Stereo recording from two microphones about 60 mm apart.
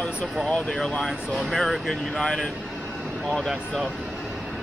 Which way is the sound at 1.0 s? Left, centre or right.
Centre.